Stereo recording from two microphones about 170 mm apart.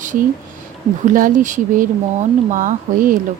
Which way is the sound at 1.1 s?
50° right (ahead or behind).